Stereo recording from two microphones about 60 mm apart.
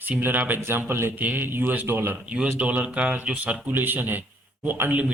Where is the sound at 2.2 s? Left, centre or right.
Right.